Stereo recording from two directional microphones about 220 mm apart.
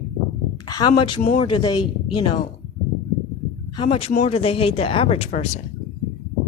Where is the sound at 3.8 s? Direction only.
25° left (ahead or behind).